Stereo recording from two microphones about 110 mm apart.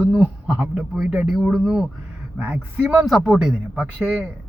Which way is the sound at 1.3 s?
5° right (ahead or behind).